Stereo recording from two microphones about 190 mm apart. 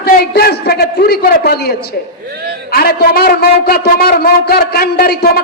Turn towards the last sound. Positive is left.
turn(degrees=55)  # may be behind; listen again after turning